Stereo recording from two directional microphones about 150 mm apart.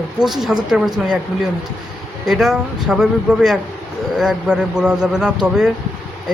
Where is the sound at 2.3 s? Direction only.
5° right (ahead or behind).